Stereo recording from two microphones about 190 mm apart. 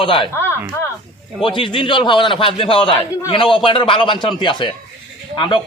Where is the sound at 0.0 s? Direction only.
25° left (ahead or behind).